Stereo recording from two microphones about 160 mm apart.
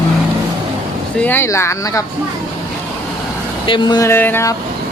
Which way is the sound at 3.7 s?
30° left (ahead or behind).